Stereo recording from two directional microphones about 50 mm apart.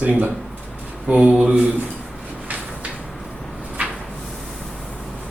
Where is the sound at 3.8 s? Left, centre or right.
Right.